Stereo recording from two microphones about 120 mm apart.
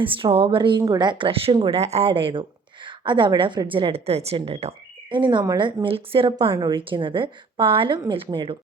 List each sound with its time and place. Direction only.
0.0 s speech: 45° right (ahead or behind)
0.8 s speech: 35° right (ahead or behind)